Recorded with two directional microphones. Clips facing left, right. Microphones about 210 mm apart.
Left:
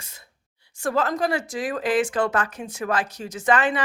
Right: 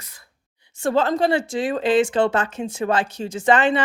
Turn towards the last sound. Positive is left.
turn(degrees=-25)  # may be behind; listen again after turning